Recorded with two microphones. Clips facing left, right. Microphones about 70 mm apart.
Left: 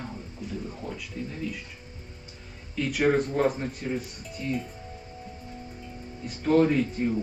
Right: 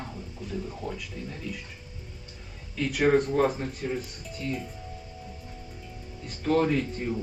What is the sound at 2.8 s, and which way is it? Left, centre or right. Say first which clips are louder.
Speech: right 1 dB; centre.